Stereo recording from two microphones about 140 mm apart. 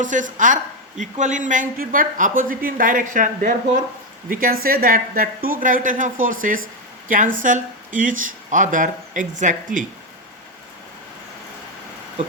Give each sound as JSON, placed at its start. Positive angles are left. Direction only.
{"t": 0.0, "sound": "speech", "side_deg": -65}
{"t": 4.3, "sound": "a woman's voice", "side_deg": -85}